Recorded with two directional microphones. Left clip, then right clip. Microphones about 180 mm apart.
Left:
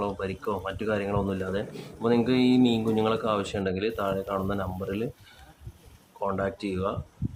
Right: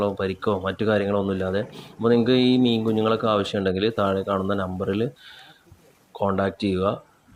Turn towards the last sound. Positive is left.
turn(degrees=-20)  # may be behind; listen again after turning